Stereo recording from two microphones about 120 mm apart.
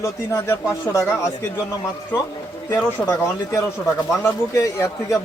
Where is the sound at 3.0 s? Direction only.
20° left (ahead or behind).